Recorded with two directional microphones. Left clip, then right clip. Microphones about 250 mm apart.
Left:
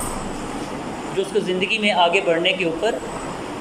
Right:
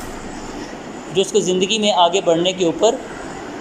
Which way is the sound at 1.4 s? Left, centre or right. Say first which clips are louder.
Right 3 dB; centre.